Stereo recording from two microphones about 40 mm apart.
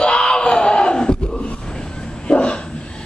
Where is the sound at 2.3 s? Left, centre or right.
Left.